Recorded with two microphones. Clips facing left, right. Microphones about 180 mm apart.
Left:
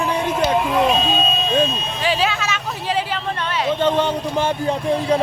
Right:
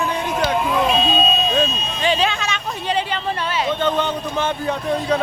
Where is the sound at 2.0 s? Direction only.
5° left (ahead or behind).